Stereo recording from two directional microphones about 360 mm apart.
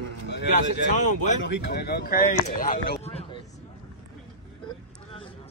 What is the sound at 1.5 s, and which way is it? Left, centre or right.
Speech, left.